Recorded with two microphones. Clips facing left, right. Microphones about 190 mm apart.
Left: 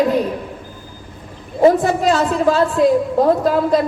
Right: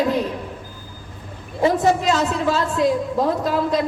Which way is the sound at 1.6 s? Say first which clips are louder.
Left 4 dB; 45° left (ahead or behind).